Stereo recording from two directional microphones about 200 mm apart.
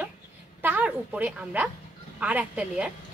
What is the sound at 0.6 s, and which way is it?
A woman's voice, 10° right (ahead or behind).